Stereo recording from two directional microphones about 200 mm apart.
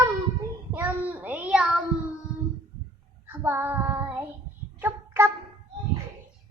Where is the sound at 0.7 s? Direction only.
10° right (ahead or behind).